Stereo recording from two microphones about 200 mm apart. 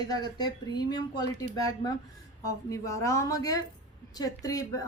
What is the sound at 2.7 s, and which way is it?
A woman's voice, 15° left (ahead or behind).